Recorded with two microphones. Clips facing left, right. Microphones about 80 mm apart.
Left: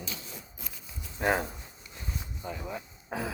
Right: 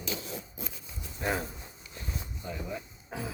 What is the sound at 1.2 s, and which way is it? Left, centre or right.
Speech, left.